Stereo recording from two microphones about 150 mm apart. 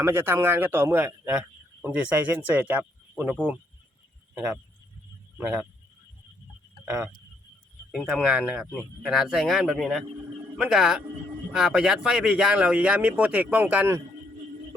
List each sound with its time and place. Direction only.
0.0 s speech: 15° right (ahead or behind)
5.4 s speech: 10° right (ahead or behind)
6.8 s speech: 15° right (ahead or behind)